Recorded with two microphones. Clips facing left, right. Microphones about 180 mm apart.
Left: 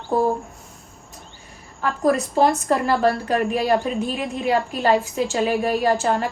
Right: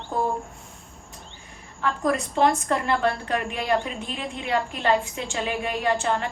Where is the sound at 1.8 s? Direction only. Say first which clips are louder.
Left 4 dB; 35° left (ahead or behind).